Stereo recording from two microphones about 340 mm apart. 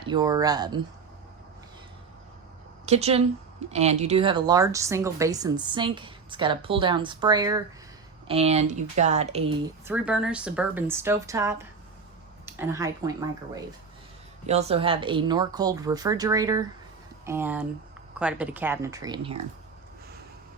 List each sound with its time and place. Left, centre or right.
0.0 s speech: centre
2.8 s speech: centre
9.8 s a woman's voice: centre
14.4 s a woman's voice: centre